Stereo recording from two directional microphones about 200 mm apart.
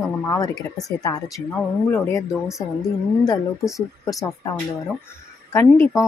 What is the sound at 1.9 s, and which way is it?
Speech, 15° left (ahead or behind).